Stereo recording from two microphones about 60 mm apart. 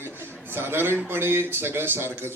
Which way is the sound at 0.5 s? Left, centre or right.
Right.